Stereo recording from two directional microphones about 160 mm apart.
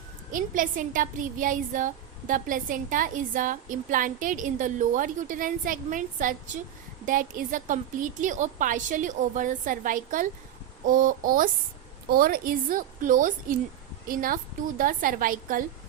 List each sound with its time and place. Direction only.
0.3 s a woman's voice: 55° right (ahead or behind)